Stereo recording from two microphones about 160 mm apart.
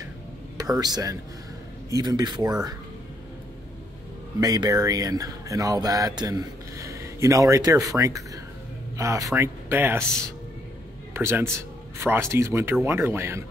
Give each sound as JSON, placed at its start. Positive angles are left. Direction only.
{"t": 0.6, "sound": "speech", "side_deg": -25}
{"t": 4.4, "sound": "speech", "side_deg": -20}
{"t": 11.1, "sound": "speech", "side_deg": -15}